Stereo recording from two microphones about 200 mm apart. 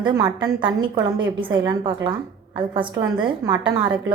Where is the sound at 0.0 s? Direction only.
20° right (ahead or behind).